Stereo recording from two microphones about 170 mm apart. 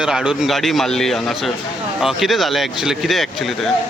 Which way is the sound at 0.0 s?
5° right (ahead or behind).